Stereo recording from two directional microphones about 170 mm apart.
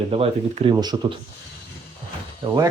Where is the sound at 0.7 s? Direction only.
25° right (ahead or behind).